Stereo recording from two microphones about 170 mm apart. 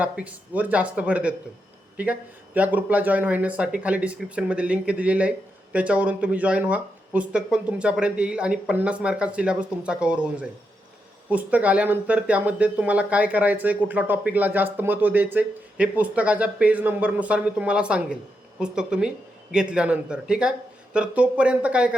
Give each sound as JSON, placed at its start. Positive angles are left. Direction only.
{"t": 0.0, "sound": "speech", "side_deg": -10}